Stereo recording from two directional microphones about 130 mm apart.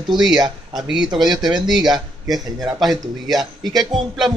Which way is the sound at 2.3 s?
30° right (ahead or behind).